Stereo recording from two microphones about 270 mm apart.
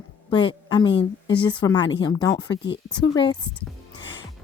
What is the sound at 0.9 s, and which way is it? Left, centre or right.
Speech, left.